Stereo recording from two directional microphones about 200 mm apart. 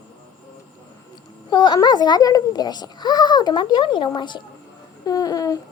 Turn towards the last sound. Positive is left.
turn(degrees=20)  # may be behind; listen again after turning